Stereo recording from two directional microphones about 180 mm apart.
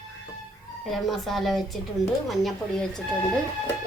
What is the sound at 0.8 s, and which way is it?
A woman's voice, centre (ahead or behind).